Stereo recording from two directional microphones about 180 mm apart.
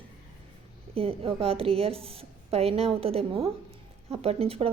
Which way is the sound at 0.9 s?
30° right (ahead or behind).